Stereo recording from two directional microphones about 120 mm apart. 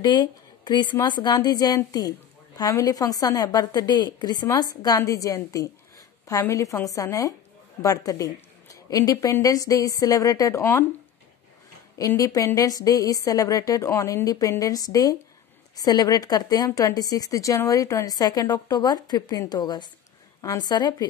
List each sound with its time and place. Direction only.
0.0 s a woman's voice: 35° left (ahead or behind); by 10.9 s 20° left (ahead or behind)
12.2 s a woman's voice: 30° left (ahead or behind)